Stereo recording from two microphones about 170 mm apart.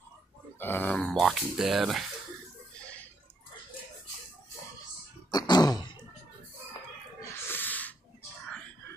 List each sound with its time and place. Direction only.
0.6 s speech: 10° left (ahead or behind)
5.3 s throat clearing: 25° left (ahead or behind)
7.2 s snort: 10° left (ahead or behind)